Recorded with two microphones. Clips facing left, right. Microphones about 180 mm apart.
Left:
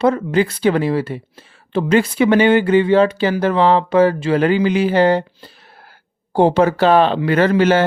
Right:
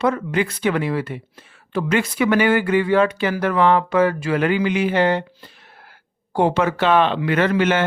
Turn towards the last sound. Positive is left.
turn(degrees=35)  # may be behind; listen again after turning